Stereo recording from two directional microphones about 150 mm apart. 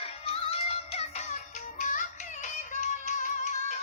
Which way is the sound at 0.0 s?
40° left (ahead or behind).